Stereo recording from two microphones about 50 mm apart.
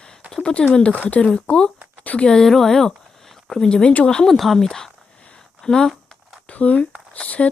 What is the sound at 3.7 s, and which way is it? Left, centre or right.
Speech, centre.